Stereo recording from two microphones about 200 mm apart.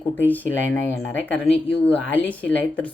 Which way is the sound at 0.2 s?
10° left (ahead or behind).